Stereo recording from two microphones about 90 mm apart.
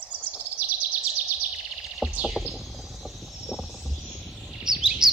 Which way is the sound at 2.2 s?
5° right (ahead or behind).